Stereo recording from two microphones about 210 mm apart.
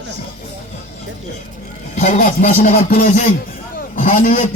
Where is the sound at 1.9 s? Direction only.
40° left (ahead or behind).